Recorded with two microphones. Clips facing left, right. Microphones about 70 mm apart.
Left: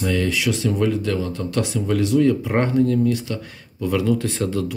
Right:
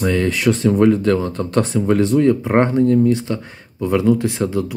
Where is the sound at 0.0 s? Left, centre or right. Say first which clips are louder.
Right 4 dB; right.